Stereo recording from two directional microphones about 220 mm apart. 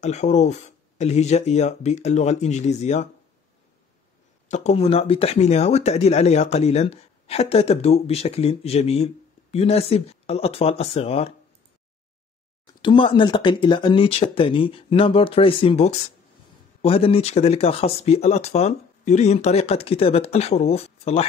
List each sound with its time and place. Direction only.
0.0 s speech: 30° left (ahead or behind)
4.5 s speech: 30° left (ahead or behind)
12.8 s speech: 25° left (ahead or behind)